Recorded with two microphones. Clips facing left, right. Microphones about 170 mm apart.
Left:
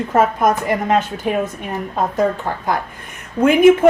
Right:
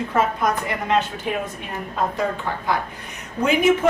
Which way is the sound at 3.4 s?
55° left (ahead or behind).